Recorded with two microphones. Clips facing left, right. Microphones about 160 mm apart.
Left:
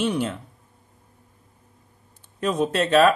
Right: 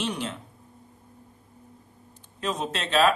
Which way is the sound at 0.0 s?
55° left (ahead or behind).